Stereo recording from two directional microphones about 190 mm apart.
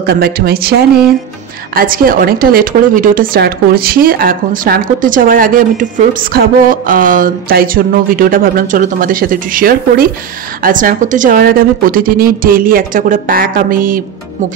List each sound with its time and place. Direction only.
0.0 s a woman's voice: 55° right (ahead or behind)